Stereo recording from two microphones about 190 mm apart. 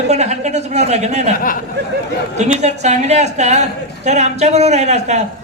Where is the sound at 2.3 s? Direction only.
35° right (ahead or behind).